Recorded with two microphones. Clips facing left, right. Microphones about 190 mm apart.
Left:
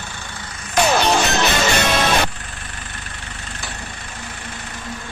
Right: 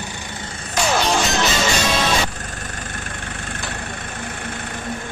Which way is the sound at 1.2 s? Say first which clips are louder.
Left 1 dB; 60° left (ahead or behind).